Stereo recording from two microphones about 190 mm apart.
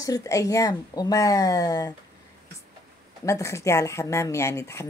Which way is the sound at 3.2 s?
15° left (ahead or behind).